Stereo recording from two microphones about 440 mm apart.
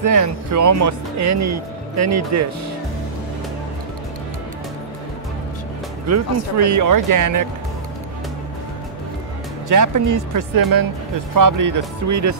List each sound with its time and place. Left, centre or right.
0.0 s speech: right
6.0 s speech: right
9.7 s speech: right